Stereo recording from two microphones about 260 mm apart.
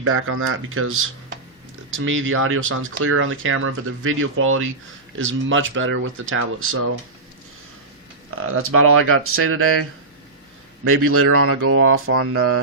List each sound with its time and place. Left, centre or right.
0.0 s speech: right
8.5 s speech: right
10.8 s speech: right